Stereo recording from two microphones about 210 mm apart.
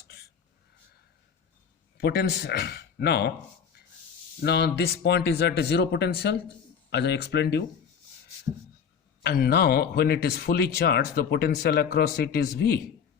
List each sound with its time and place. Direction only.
2.0 s speech: 50° left (ahead or behind)
9.2 s speech: 50° left (ahead or behind)